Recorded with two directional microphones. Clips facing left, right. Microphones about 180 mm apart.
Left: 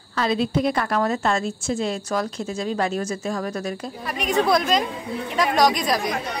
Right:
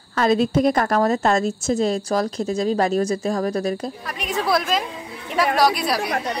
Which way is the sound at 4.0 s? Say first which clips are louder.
Left 3 dB; centre (ahead or behind).